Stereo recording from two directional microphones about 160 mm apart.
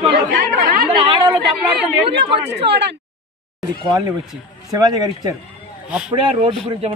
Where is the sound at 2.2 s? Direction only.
90° right.